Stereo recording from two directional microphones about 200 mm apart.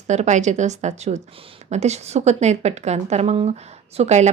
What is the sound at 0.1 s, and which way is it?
Speech, 35° right (ahead or behind).